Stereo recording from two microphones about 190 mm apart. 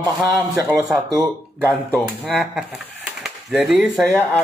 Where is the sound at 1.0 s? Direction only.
15° right (ahead or behind).